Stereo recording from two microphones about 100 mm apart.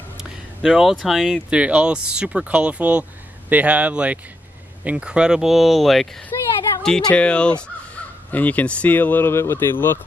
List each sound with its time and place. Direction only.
0.2 s speech: centre (ahead or behind); by 9.9 s 25° left (ahead or behind)